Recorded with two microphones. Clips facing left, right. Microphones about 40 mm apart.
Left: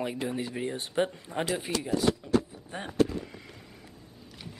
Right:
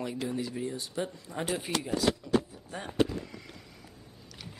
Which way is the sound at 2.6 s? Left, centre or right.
Left.